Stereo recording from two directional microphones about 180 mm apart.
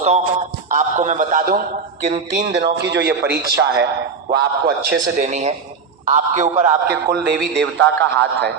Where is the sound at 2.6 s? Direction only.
65° right (ahead or behind).